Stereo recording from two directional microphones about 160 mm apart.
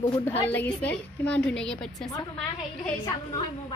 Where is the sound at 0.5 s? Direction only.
10° left (ahead or behind).